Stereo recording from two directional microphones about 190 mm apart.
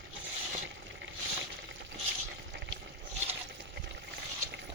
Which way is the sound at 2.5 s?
65° right (ahead or behind).